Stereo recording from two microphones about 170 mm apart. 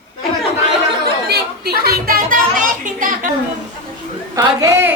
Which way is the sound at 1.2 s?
65° right (ahead or behind).